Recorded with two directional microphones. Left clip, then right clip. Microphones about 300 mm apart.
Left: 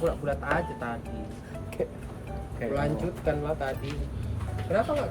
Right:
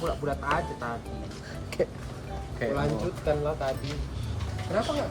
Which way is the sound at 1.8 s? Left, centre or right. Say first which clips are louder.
Right 3 dB; centre.